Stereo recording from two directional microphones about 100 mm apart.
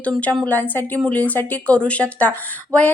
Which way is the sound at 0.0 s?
15° left (ahead or behind).